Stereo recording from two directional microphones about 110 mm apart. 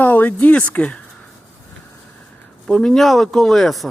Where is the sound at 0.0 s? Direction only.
15° left (ahead or behind).